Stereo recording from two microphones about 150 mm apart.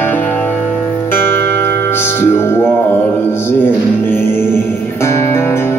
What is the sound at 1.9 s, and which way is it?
Music, 15° left (ahead or behind).